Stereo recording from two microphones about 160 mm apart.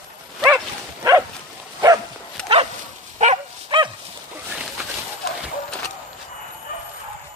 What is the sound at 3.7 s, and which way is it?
Dog, 30° right (ahead or behind).